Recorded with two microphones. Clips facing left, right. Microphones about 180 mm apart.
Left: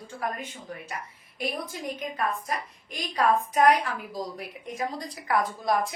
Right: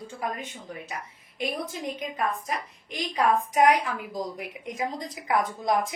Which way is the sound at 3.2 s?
15° right (ahead or behind).